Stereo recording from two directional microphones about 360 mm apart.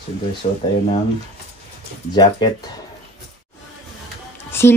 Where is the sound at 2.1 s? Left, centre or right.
Centre.